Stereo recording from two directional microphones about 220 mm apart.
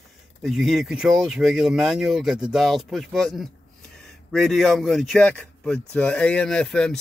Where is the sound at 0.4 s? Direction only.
Centre (ahead or behind).